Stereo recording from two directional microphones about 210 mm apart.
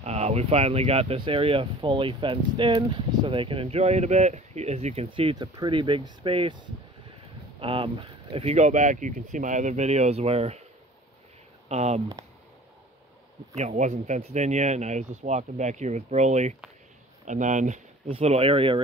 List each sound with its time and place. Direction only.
0.0 s speech: 30° right (ahead or behind)
11.7 s speech: 30° right (ahead or behind)
13.6 s speech: 35° right (ahead or behind)